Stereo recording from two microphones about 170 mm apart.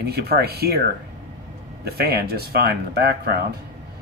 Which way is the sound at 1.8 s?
65° right (ahead or behind).